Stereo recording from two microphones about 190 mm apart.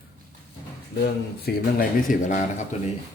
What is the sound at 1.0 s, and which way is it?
Speech, 50° left (ahead or behind).